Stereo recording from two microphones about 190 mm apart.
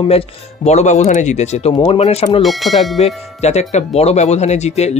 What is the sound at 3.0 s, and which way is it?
Speech, 35° left (ahead or behind).